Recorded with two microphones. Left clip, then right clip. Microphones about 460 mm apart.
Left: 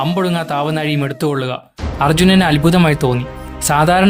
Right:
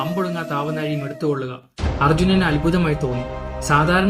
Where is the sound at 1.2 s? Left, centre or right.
Left.